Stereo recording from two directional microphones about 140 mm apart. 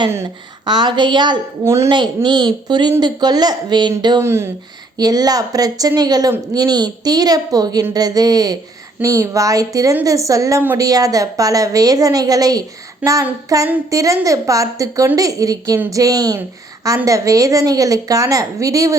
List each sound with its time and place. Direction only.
0.6 s speech: 30° right (ahead or behind)
1.6 s a woman's voice: 20° right (ahead or behind)
1.9 s speech: 35° right (ahead or behind)
4.2 s a woman's voice: 20° right (ahead or behind)
13.0 s child singing: 10° right (ahead or behind)
13.5 s a woman's voice: 25° right (ahead or behind)